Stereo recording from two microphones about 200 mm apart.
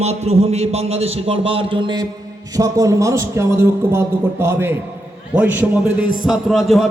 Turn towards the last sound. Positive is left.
turn(degrees=0)  # may be behind; listen again after turning